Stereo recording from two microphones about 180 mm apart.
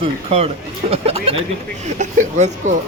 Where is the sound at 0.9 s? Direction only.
30° right (ahead or behind).